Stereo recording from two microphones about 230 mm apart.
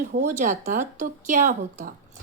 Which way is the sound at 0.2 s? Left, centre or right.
Right.